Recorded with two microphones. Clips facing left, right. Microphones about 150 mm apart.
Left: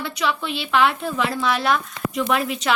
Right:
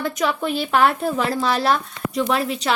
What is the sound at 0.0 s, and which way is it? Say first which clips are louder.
A woman's voice: right 3 dB; 45° right (ahead or behind).